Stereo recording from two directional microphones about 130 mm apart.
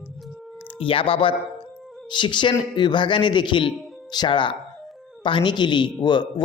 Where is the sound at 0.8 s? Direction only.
45° left (ahead or behind).